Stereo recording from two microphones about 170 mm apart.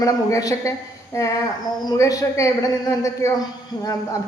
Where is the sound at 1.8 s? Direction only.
20° left (ahead or behind).